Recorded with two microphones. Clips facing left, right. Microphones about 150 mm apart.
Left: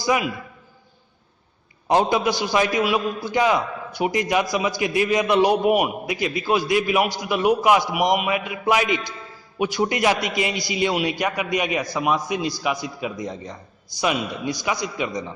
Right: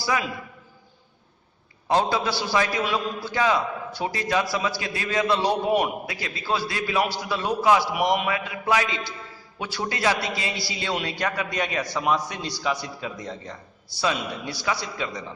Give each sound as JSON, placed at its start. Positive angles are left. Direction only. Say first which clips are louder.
{"t": 0.0, "sound": "a man's voice", "louder": "left 4 dB", "side_deg": 20}
{"t": 1.9, "sound": "a man's voice", "louder": "left 4 dB", "side_deg": 15}